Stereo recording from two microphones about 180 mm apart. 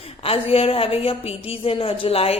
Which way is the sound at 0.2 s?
30° left (ahead or behind).